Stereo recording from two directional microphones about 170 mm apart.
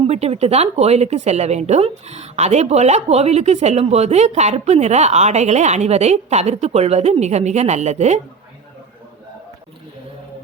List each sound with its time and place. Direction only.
0.0 s speech: 35° right (ahead or behind)